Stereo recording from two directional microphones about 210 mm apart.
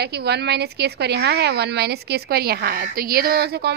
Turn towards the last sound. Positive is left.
turn(degrees=-50)  # may be behind; listen again after turning